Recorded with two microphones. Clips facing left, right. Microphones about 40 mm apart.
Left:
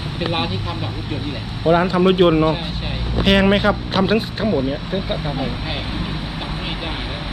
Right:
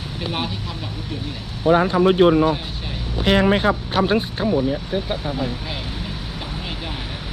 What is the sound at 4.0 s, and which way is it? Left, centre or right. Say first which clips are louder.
Speech: left 1 dB; left.